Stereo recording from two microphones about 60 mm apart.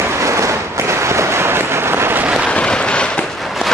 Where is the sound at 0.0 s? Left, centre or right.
Right.